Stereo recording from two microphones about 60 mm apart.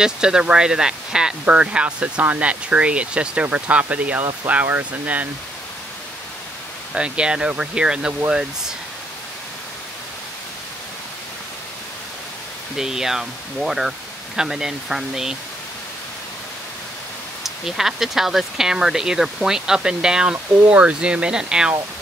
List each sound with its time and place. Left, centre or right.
0.0 s speech: centre
4.6 s speech: right
6.9 s speech: centre
12.7 s speech: centre
17.4 s speech: centre